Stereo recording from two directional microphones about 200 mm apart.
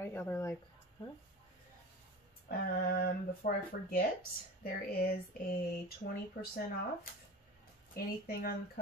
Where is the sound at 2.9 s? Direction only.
50° left (ahead or behind).